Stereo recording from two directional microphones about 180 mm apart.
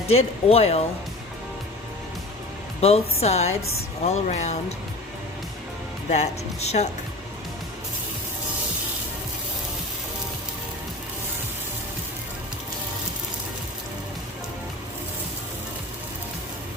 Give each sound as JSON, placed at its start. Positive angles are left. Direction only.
{"t": 0.1, "sound": "speech", "side_deg": 35}
{"t": 2.8, "sound": "speech", "side_deg": 35}
{"t": 6.1, "sound": "speech", "side_deg": 40}